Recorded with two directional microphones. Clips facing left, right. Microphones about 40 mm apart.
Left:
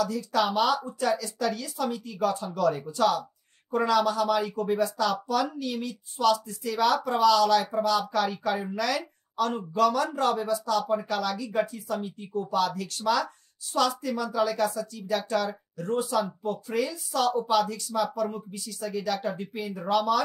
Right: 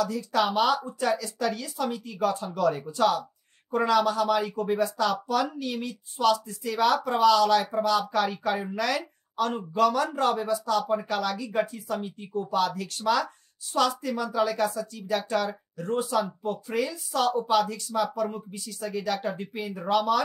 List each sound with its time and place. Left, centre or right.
0.0 s speech: right